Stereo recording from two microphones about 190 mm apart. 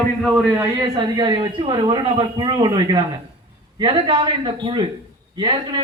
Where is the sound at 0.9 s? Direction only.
20° right (ahead or behind).